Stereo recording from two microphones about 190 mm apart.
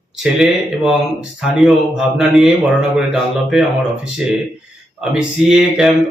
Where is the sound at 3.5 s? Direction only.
Centre (ahead or behind).